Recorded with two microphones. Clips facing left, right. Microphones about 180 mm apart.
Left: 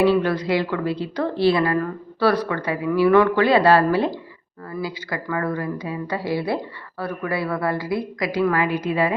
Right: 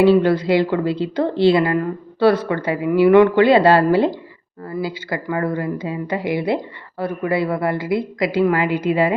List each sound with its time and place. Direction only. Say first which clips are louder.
0.0 s speech: right 5 dB; 25° right (ahead or behind)